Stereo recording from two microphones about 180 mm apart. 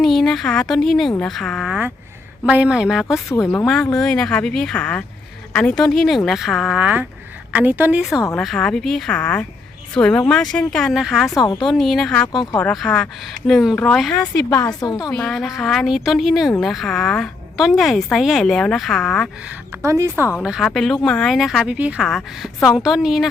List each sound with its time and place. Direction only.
0.0 s a woman's voice: centre (ahead or behind)
12.3 s a woman's voice: 20° left (ahead or behind)
12.5 s speech: 5° left (ahead or behind)
14.8 s a woman's voice: 20° left (ahead or behind)
15.1 s speech: 5° left (ahead or behind)
19.8 s a woman's voice: 15° right (ahead or behind)
20.4 s speech: 5° right (ahead or behind)